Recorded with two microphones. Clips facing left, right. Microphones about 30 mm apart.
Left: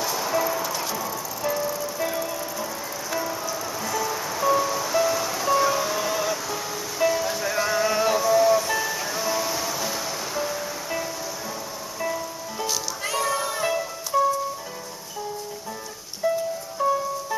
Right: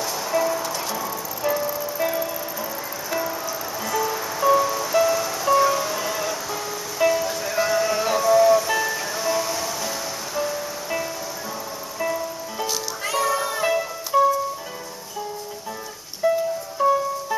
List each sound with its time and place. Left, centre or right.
0.0 s music: centre
16.2 s music: centre